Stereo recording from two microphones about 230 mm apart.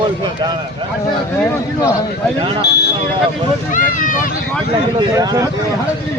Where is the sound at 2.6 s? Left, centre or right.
Left.